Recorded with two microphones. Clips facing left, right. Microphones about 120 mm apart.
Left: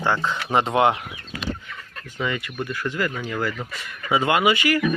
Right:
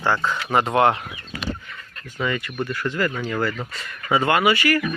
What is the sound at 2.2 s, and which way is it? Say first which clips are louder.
Speech: right 2 dB; 15° left (ahead or behind).